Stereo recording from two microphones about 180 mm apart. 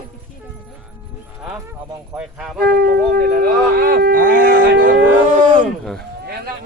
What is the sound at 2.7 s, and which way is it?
Speech, 60° right (ahead or behind).